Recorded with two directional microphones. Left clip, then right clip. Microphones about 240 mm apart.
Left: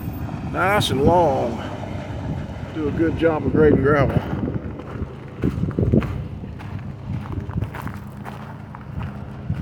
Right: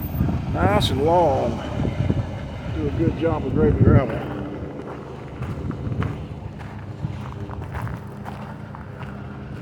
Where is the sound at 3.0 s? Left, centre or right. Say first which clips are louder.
Left 4 dB; left.